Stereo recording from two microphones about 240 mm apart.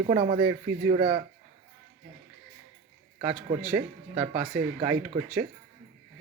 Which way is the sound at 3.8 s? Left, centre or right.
Centre.